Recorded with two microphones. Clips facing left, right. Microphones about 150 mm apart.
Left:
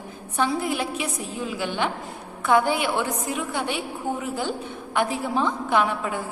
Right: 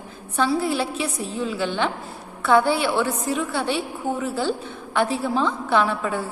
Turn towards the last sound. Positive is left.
turn(degrees=15)  # may be behind; listen again after turning